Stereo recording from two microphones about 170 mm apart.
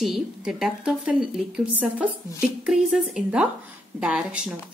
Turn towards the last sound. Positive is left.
turn(degrees=-5)  # may be behind; listen again after turning